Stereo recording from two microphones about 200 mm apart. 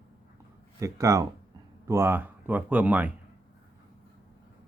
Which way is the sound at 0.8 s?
15° right (ahead or behind).